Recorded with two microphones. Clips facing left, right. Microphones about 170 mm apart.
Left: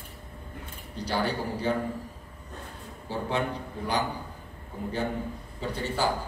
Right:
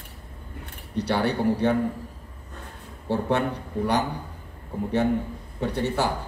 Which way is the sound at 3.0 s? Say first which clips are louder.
Right 6 dB; 65° right (ahead or behind).